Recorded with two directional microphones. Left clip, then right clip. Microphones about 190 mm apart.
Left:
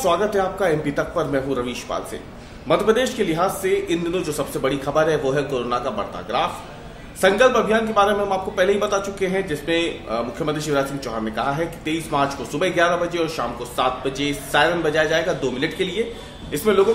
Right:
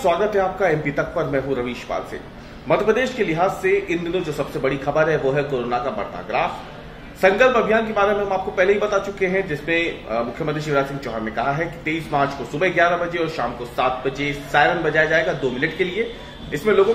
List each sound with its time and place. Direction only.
0.0 s speech: 15° left (ahead or behind)
7.2 s speech: 15° left (ahead or behind)